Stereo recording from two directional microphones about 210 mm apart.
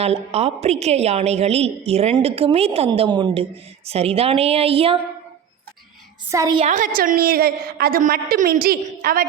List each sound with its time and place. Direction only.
0.0 s a woman's voice: 30° right (ahead or behind)
6.3 s a woman's voice: 15° right (ahead or behind)
6.6 s a woman's voice: 35° right (ahead or behind)